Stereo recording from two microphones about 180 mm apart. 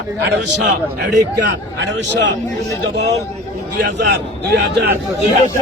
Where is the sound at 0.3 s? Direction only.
75° right (ahead or behind).